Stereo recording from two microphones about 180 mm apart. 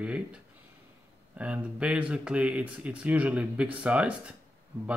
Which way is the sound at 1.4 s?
5° right (ahead or behind).